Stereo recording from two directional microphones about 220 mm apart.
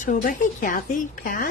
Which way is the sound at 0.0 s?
35° left (ahead or behind).